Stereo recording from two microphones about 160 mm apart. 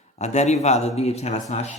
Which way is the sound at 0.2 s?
45° left (ahead or behind).